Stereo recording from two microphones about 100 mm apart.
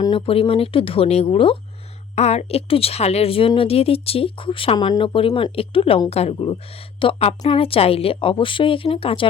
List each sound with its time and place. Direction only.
0.1 s a woman's voice: 70° left (ahead or behind)
2.1 s a woman's voice: 90° left; by 6.0 s 70° left (ahead or behind)
6.1 s a woman's voice: 90° left; by 9.2 s 70° left (ahead or behind)